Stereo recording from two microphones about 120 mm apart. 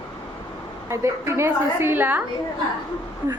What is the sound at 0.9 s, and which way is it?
A woman's voice, 25° right (ahead or behind).